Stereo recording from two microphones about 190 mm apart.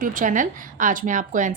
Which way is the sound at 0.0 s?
45° right (ahead or behind).